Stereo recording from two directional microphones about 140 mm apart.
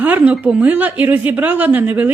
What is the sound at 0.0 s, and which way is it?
A woman's voice, 10° right (ahead or behind).